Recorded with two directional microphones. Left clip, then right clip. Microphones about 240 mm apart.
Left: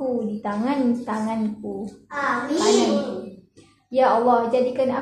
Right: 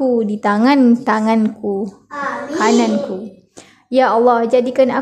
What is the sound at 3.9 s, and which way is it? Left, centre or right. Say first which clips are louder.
A woman's voice: right 5 dB; right.